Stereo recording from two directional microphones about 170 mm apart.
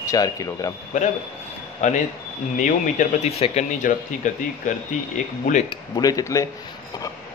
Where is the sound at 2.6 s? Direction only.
45° left (ahead or behind).